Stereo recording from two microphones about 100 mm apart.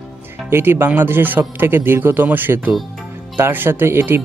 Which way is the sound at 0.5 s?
25° right (ahead or behind).